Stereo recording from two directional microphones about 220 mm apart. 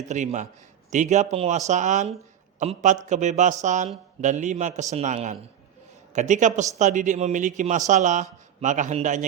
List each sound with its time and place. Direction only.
0.1 s a man's voice: 35° right (ahead or behind)